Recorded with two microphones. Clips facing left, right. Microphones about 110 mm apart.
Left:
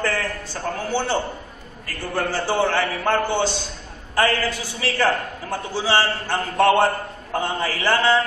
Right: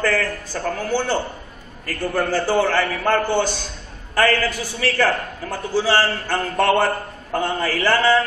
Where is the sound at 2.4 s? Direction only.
20° left (ahead or behind).